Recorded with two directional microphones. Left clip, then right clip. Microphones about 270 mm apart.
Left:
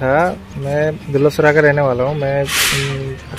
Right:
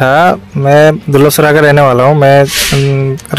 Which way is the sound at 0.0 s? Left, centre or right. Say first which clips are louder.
Right 8 dB; right.